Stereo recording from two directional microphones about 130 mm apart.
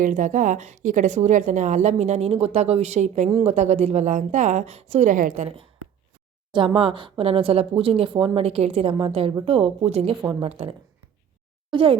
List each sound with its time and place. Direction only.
0.0 s speech: 80° right
6.5 s a woman's voice: 45° right (ahead or behind)